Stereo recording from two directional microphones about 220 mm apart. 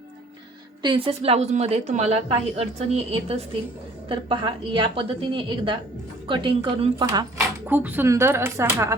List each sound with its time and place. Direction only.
0.8 s a woman's voice: 20° right (ahead or behind)
7.7 s speech: 10° right (ahead or behind)